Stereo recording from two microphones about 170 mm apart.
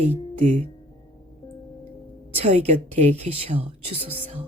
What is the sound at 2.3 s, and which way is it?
A woman's voice, 40° right (ahead or behind).